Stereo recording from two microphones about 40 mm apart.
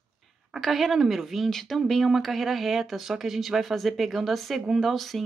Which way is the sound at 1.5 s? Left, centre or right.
Centre.